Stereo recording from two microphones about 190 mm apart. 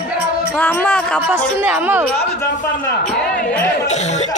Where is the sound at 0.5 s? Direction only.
10° left (ahead or behind).